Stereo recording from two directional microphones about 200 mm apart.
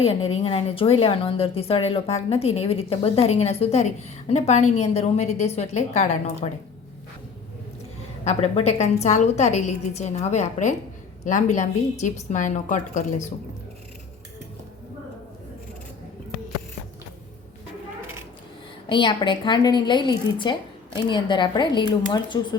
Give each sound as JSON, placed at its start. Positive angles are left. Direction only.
{"t": 0.0, "sound": "a woman's voice", "side_deg": 30}
{"t": 8.2, "sound": "a woman's voice", "side_deg": 30}
{"t": 18.9, "sound": "a woman's voice", "side_deg": 25}